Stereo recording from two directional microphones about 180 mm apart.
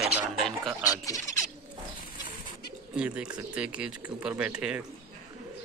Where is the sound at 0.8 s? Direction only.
20° left (ahead or behind).